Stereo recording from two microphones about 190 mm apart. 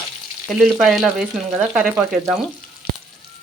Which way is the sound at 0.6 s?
Centre (ahead or behind).